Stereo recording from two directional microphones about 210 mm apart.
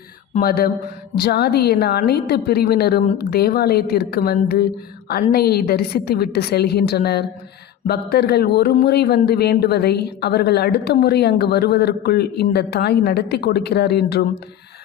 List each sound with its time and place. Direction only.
0.3 s speech: 45° left (ahead or behind)